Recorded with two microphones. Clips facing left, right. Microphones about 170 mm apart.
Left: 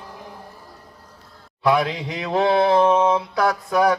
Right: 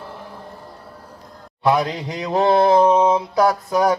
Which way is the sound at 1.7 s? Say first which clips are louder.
Right 1 dB; 45° right (ahead or behind).